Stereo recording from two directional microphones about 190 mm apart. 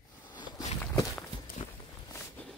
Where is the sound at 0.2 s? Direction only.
25° left (ahead or behind).